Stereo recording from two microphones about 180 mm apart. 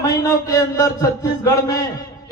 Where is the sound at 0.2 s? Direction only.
20° left (ahead or behind).